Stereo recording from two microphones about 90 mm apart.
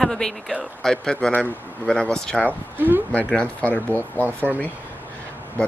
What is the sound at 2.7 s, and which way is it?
Speech, 20° right (ahead or behind).